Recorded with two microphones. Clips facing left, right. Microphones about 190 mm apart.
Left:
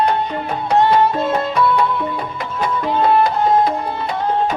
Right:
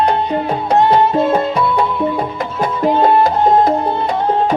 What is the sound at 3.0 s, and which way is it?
Music, 45° right (ahead or behind).